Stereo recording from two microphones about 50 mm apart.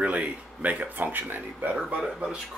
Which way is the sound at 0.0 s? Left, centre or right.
Right.